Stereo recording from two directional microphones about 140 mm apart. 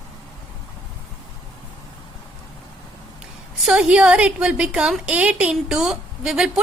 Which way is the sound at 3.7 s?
10° right (ahead or behind).